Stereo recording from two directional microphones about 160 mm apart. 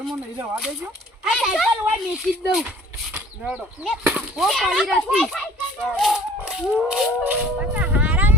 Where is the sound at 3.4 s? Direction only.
10° right (ahead or behind).